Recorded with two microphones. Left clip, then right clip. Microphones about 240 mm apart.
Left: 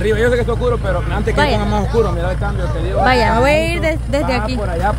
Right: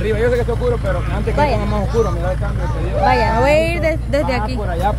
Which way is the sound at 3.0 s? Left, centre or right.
Centre.